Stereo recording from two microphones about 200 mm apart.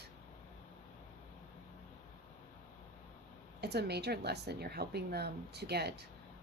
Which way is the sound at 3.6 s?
55° right (ahead or behind).